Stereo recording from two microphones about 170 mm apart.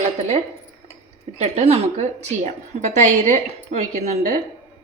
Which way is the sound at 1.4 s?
40° right (ahead or behind).